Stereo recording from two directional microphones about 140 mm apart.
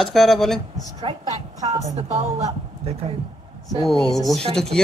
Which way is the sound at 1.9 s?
55° right (ahead or behind).